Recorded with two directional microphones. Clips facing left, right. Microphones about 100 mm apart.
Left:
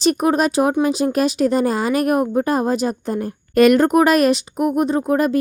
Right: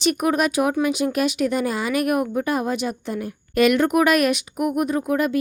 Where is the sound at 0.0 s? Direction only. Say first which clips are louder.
Left 4 dB; 35° left (ahead or behind).